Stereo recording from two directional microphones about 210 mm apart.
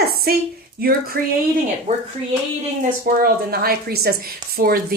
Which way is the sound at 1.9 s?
30° right (ahead or behind).